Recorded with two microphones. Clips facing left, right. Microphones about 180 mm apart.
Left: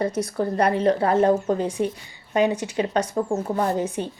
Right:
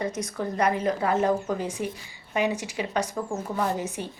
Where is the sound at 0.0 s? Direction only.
35° left (ahead or behind).